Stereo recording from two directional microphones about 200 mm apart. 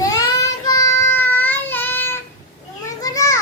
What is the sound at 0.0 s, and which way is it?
Child singing, 20° left (ahead or behind).